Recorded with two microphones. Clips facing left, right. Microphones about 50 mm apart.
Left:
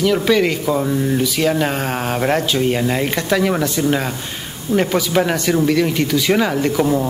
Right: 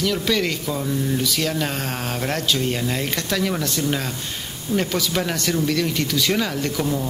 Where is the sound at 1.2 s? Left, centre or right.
Centre.